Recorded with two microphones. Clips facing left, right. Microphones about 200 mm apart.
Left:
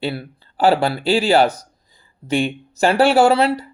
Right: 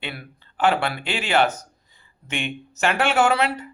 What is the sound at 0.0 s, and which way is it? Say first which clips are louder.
Speech: left 10 dB; 35° left (ahead or behind).